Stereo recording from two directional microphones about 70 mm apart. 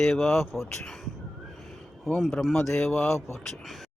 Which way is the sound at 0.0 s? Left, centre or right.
Centre.